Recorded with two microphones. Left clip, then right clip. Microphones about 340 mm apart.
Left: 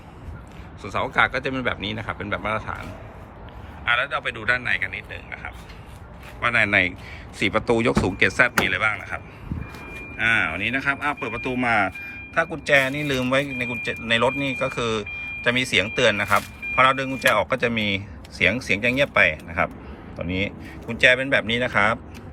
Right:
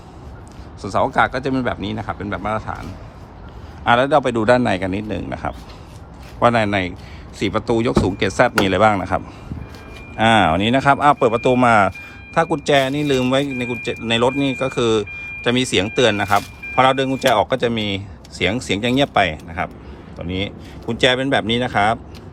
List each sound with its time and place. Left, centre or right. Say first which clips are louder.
0.8 s speech: right 4 dB; centre
4.0 s speech: right 9 dB; centre
10.5 s speech: right 7 dB; right
10.8 s speech: right 13 dB; centre